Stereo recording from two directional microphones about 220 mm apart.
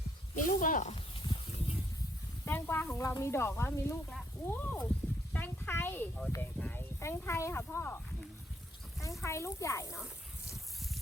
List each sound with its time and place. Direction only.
0.3 s snake: 40° left (ahead or behind)
2.4 s speech: 10° left (ahead or behind)
9.2 s speech: 15° left (ahead or behind)